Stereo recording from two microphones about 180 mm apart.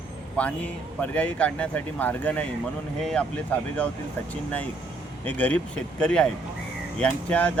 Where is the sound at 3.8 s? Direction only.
5° left (ahead or behind).